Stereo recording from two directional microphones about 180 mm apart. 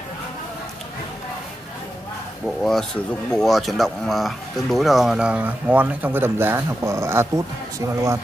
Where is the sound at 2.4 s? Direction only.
Centre (ahead or behind).